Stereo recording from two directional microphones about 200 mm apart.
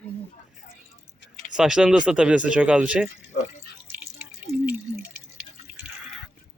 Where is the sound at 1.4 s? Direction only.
5° right (ahead or behind).